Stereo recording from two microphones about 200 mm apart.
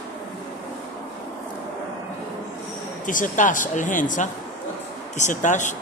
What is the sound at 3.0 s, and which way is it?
Speech, 40° left (ahead or behind).